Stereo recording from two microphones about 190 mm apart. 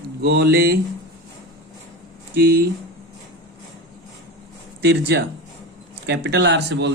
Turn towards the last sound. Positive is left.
turn(degrees=-65)  # may be behind; listen again after turning